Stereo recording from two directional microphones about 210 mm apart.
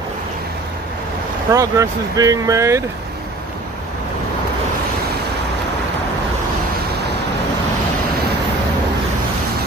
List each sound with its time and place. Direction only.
1.5 s speech: 15° right (ahead or behind)